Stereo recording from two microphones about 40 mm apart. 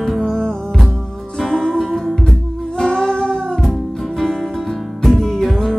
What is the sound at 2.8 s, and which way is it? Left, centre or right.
Music, centre.